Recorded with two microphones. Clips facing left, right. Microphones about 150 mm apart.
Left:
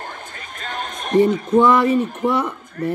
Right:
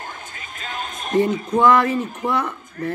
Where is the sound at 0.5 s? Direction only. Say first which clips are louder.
Left 2 dB; centre (ahead or behind).